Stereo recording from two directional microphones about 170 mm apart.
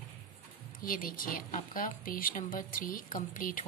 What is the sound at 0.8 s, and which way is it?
A woman's voice, 55° left (ahead or behind).